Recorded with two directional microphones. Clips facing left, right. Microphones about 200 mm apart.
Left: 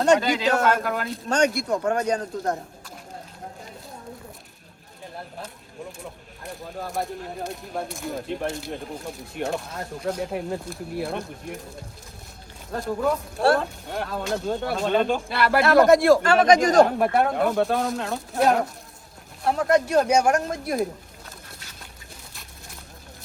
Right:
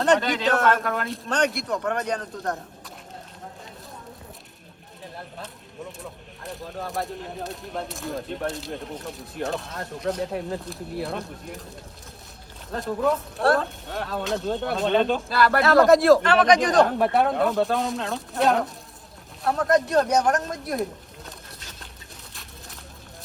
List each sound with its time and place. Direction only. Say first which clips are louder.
0.0 s speech: left 2 dB; centre (ahead or behind)
2.0 s speech: left 3 dB; 45° left (ahead or behind)
2.3 s speech: left 3 dB; 25° left (ahead or behind)
6.0 s speech: even; centre (ahead or behind)
12.7 s speech: even; centre (ahead or behind)
16.2 s speech: left 1 dB; 45° left (ahead or behind)
16.6 s speech: left 2 dB; centre (ahead or behind)